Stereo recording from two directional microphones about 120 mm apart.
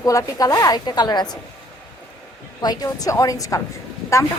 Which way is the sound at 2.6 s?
35° left (ahead or behind).